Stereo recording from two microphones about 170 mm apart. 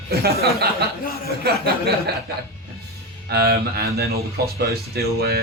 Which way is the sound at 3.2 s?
65° right (ahead or behind).